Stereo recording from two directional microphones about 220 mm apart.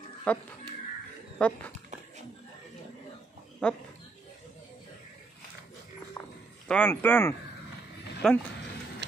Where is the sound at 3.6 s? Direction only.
5° left (ahead or behind).